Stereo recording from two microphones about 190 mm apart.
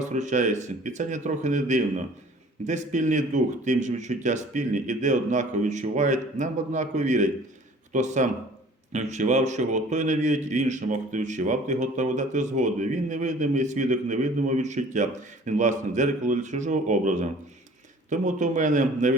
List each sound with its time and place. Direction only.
0.0 s speech: 40° right (ahead or behind)